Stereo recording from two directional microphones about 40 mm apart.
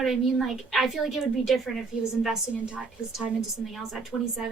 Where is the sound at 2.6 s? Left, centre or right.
Right.